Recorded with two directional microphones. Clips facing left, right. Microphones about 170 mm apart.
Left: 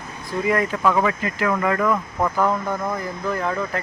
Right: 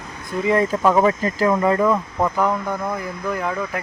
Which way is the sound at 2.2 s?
5° right (ahead or behind).